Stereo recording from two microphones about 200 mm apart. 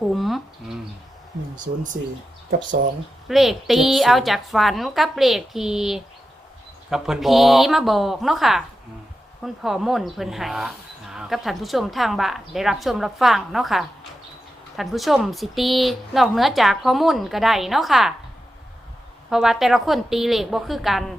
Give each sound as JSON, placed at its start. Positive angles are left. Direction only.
{"t": 0.1, "sound": "a sound", "side_deg": 0}
{"t": 1.5, "sound": "speech", "side_deg": -40}
{"t": 3.2, "sound": "speech", "side_deg": 0}
{"t": 19.3, "sound": "speech", "side_deg": 0}